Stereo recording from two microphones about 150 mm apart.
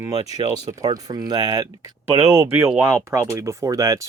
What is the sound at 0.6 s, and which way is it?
Speech, 25° right (ahead or behind).